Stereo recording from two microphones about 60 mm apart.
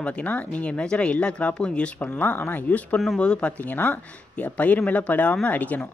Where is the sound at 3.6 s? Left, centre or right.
Left.